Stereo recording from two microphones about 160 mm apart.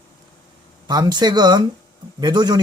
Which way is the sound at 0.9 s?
25° right (ahead or behind).